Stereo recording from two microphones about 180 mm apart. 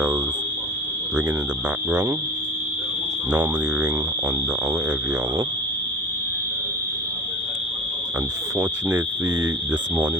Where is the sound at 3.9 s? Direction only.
20° right (ahead or behind).